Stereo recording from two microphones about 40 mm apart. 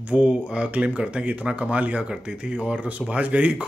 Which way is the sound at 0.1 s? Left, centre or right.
Right.